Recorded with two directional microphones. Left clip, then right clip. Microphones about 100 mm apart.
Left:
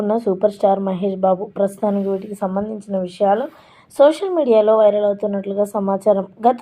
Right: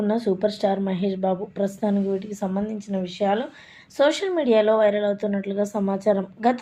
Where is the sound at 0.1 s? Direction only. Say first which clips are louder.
Left 7 dB; 45° left (ahead or behind).